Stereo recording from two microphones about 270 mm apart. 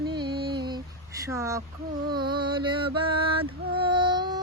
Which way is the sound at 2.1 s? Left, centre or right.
Centre.